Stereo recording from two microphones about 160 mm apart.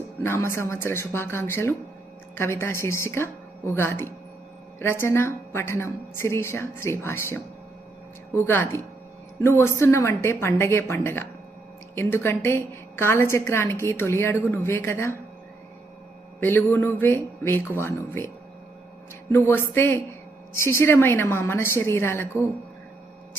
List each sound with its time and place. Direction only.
0.2 s a woman's voice: 15° left (ahead or behind)
9.4 s a woman's voice: 15° left (ahead or behind)
16.4 s a woman's voice: 15° left (ahead or behind)
19.3 s a woman's voice: 15° left (ahead or behind)